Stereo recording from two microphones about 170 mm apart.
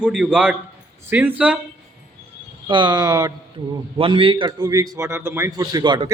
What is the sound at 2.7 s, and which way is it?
A man's voice, 25° right (ahead or behind).